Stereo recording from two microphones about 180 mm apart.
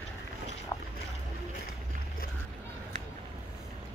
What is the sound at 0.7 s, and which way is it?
Boat, 20° left (ahead or behind).